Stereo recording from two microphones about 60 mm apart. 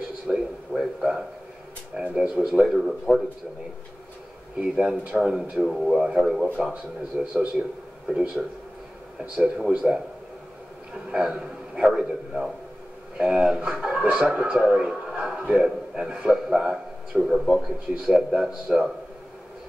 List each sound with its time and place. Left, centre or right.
0.3 s a sound: centre
2.0 s speech: centre
4.6 s speech: centre
5.3 s a man's voice: centre